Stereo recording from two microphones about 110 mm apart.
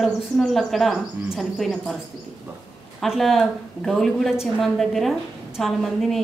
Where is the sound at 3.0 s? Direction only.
Centre (ahead or behind).